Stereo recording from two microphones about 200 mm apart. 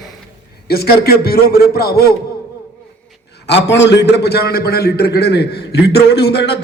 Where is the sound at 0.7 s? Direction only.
50° left (ahead or behind).